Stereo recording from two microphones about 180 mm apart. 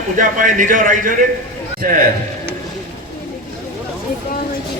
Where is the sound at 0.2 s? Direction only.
45° right (ahead or behind).